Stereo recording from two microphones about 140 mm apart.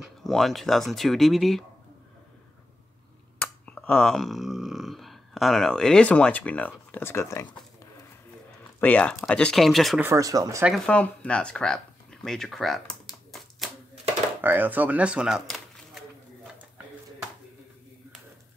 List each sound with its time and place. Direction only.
0.2 s speech: centre (ahead or behind)
3.3 s a sound: 10° left (ahead or behind)
6.9 s speech: 15° left (ahead or behind)
8.8 s speech: 10° left (ahead or behind)
9.9 s speech: 20° right (ahead or behind)
10.9 s speech: 10° left (ahead or behind)
14.4 s speech: 15° right (ahead or behind)